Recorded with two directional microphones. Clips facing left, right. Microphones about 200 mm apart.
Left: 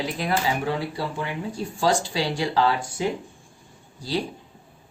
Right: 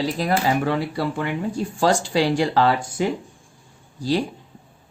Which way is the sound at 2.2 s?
50° right (ahead or behind).